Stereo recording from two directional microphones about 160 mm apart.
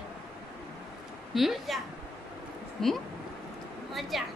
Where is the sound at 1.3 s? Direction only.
Centre (ahead or behind).